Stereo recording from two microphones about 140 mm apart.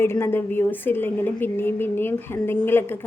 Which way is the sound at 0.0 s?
15° left (ahead or behind).